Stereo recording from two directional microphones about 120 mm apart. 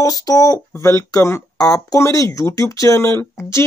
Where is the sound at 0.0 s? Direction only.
30° left (ahead or behind).